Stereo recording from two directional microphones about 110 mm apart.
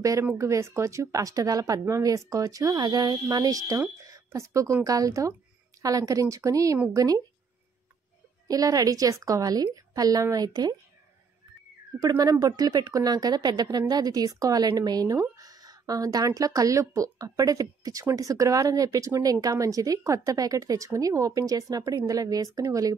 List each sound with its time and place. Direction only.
0.0 s speech: 30° right (ahead or behind)
4.0 s a sound: 30° right (ahead or behind)
4.8 s speech: 30° right (ahead or behind)
8.5 s speech: 35° right (ahead or behind)
12.0 s speech: 35° right (ahead or behind)